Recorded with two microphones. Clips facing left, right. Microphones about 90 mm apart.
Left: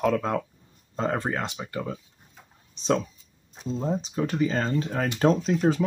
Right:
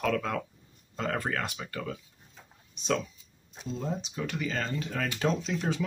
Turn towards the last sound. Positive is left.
turn(degrees=40)  # may be behind; listen again after turning